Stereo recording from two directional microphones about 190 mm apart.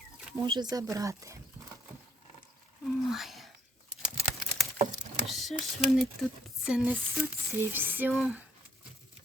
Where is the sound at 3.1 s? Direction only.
Centre (ahead or behind).